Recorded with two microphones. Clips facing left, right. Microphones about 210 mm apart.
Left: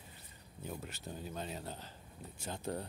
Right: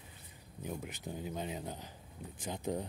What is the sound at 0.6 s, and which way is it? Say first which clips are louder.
Speech: right 3 dB; 15° right (ahead or behind).